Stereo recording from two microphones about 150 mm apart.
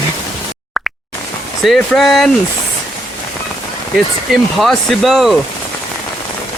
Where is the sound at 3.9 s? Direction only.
Centre (ahead or behind).